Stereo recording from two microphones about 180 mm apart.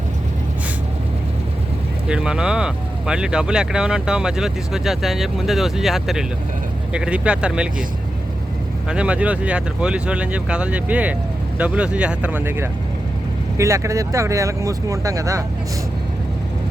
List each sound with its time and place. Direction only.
2.0 s speech: 5° right (ahead or behind)
8.9 s speech: 5° right (ahead or behind)